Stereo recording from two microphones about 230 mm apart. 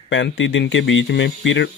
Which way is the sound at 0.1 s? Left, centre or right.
Left.